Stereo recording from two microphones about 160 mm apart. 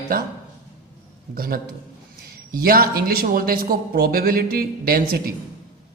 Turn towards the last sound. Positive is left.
turn(degrees=-70)  # may be behind; listen again after turning